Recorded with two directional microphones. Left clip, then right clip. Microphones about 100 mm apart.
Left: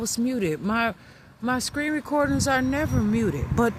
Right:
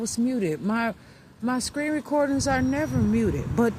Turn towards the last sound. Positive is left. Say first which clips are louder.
# even
turn(degrees=30)  # may be behind; listen again after turning